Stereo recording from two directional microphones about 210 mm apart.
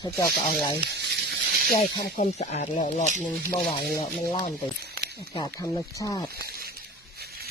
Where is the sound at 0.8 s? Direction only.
50° right (ahead or behind).